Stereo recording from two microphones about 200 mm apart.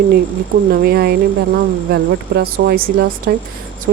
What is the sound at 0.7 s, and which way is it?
Speech, 50° right (ahead or behind).